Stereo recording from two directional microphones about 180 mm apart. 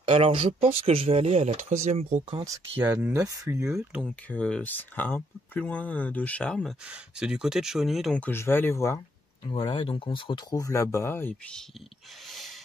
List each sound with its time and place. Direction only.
0.0 s speech: 30° right (ahead or behind)
2.3 s speech: 20° right (ahead or behind)
3.7 s speech: centre (ahead or behind)
9.5 s speech: 30° left (ahead or behind); by 11.6 s 10° left (ahead or behind)
12.3 s a sound: centre (ahead or behind)